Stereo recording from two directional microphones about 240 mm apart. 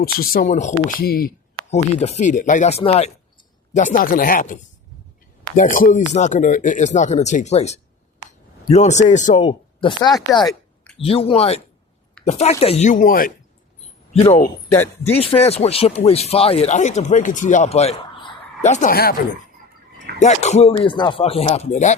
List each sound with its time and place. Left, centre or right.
0.0 s speech: left
1.7 s speech: left
5.7 s speech: left
20.1 s speech: left